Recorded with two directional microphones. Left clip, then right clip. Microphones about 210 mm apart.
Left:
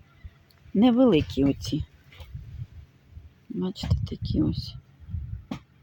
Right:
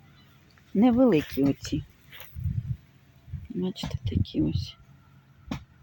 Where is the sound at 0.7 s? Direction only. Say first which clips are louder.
Left 1 dB; 5° left (ahead or behind).